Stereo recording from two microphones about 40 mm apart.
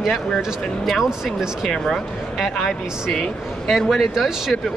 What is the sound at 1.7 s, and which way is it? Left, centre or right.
Speech, centre.